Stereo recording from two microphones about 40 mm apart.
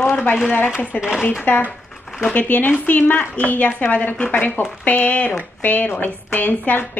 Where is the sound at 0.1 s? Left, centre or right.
Left.